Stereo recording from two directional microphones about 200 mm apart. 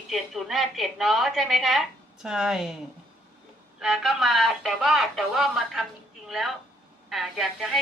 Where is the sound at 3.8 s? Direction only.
Centre (ahead or behind).